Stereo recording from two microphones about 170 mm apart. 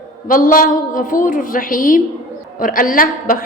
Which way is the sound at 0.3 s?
55° left (ahead or behind).